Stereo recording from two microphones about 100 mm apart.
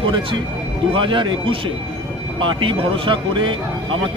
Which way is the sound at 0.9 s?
55° right (ahead or behind).